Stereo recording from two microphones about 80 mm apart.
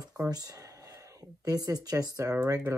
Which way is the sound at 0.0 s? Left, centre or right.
Right.